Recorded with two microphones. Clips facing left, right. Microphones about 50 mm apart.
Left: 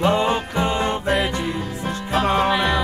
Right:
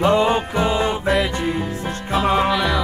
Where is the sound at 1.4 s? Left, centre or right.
Centre.